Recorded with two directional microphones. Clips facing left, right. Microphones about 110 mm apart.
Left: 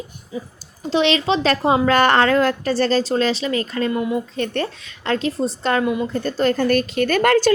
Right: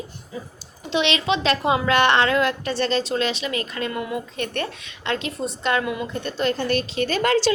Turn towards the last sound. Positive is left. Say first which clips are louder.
# left 4 dB
turn(degrees=50)  # may be behind; listen again after turning